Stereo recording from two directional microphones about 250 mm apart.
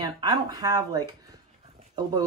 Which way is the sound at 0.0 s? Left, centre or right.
Centre.